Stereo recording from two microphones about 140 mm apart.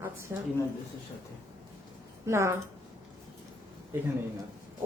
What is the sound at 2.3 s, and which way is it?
Speech, 20° right (ahead or behind).